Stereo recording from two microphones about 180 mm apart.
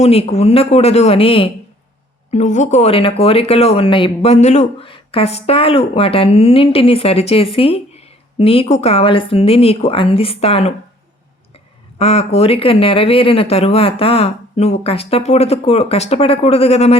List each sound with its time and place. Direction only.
0.0 s speech: 35° left (ahead or behind)
2.3 s speech: 40° left (ahead or behind)
11.9 s speech: 35° left (ahead or behind)